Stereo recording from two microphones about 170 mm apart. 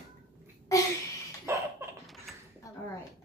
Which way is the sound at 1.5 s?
20° right (ahead or behind).